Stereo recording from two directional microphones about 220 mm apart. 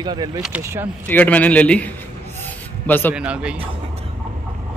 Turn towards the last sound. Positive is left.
turn(degrees=-5)  # may be behind; listen again after turning